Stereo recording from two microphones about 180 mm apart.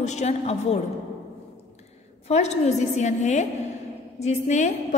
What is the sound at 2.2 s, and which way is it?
A woman's voice, 35° left (ahead or behind).